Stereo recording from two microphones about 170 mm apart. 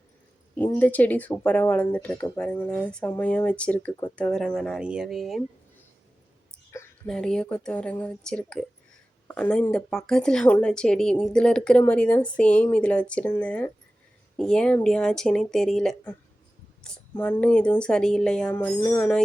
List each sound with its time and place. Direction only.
0.8 s speech: 10° left (ahead or behind)
6.7 s speech: 5° left (ahead or behind)